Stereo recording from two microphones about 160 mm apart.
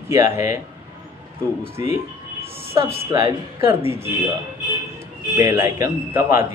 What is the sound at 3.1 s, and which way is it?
Speech, 20° right (ahead or behind).